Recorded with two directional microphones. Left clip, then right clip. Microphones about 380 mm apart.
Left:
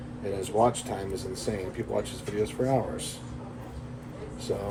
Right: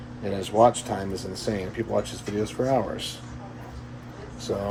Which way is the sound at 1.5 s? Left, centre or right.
Right.